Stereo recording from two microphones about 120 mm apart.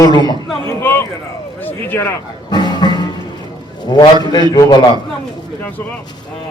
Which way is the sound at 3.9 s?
35° left (ahead or behind).